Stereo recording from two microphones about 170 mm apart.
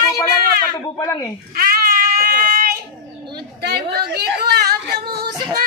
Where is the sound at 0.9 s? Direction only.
15° left (ahead or behind).